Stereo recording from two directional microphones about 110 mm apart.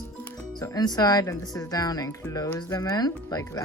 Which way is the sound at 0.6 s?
35° left (ahead or behind).